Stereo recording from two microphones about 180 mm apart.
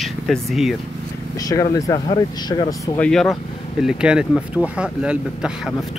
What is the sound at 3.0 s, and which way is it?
Speech, 5° left (ahead or behind).